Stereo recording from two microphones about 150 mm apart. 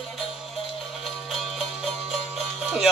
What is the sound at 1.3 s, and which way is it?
Music, centre (ahead or behind).